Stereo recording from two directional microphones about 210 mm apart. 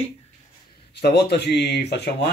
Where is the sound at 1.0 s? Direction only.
50° left (ahead or behind).